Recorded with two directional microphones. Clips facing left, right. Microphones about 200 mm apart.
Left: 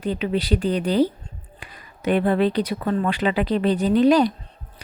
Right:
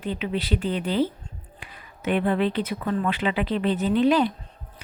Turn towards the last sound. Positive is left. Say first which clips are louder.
# left 4 dB
turn(degrees=40)  # may be behind; listen again after turning